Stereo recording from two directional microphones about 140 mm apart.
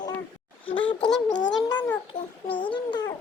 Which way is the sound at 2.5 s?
35° left (ahead or behind).